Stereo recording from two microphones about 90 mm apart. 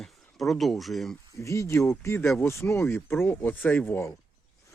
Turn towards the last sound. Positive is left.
turn(degrees=25)  # may be behind; listen again after turning